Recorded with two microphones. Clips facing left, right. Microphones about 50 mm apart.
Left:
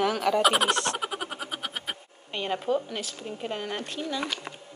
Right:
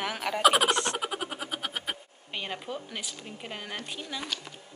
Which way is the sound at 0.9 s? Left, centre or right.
Centre.